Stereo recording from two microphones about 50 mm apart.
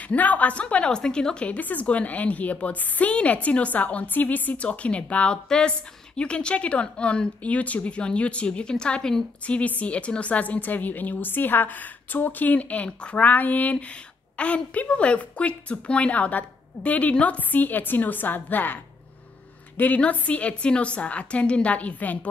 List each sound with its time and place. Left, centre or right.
0.0 s a woman's voice: left
13.3 s a woman's voice: left
20.0 s a woman's voice: left